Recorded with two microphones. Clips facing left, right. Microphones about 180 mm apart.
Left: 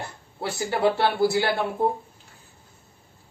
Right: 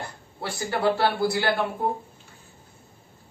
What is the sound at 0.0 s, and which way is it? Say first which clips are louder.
A man's voice: left 2 dB; 20° left (ahead or behind).